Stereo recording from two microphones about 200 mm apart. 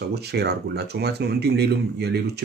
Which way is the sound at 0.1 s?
55° right (ahead or behind).